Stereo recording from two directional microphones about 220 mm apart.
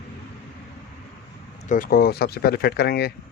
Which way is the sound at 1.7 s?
40° left (ahead or behind).